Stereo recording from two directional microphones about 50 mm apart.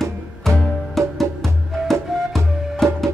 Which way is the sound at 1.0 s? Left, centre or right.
Centre.